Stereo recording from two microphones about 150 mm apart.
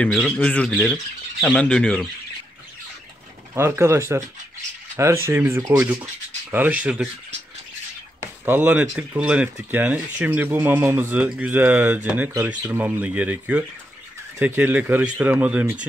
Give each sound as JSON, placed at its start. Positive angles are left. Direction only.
{"t": 0.0, "sound": "speech", "side_deg": 5}
{"t": 3.5, "sound": "speech", "side_deg": -15}
{"t": 8.2, "sound": "speech", "side_deg": -15}